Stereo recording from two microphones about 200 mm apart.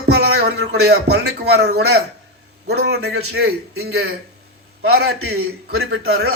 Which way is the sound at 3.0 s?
90° right.